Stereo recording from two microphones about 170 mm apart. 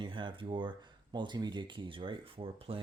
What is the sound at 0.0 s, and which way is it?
Speech, 30° right (ahead or behind).